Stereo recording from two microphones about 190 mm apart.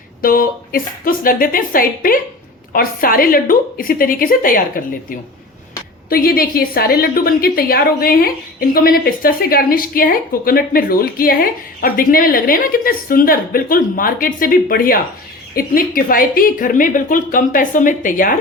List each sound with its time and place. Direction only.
0.2 s a woman's voice: 50° left (ahead or behind)
6.1 s a woman's voice: 50° left (ahead or behind)